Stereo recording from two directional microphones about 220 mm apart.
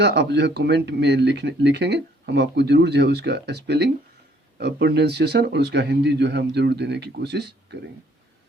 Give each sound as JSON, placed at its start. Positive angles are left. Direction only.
{"t": 0.0, "sound": "speech", "side_deg": -50}